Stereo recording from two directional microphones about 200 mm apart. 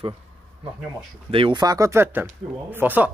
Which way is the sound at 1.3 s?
25° right (ahead or behind).